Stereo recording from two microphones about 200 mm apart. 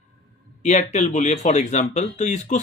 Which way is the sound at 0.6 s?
35° left (ahead or behind).